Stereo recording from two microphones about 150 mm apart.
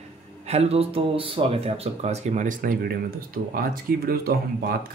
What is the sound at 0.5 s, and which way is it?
Speech, 45° right (ahead or behind).